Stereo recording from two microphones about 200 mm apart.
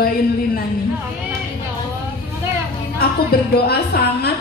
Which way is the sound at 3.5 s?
50° left (ahead or behind).